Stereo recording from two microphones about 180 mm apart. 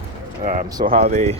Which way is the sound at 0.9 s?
35° right (ahead or behind).